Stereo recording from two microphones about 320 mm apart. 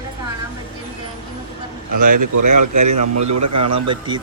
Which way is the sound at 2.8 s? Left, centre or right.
Right.